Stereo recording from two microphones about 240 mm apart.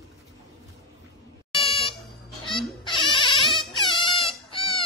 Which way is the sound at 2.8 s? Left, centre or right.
Centre.